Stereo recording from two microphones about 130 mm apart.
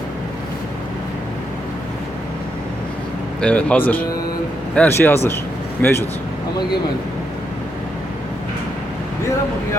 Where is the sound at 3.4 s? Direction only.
10° left (ahead or behind).